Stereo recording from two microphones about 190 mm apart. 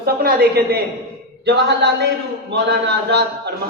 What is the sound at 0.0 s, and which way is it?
A woman's voice, 55° right (ahead or behind).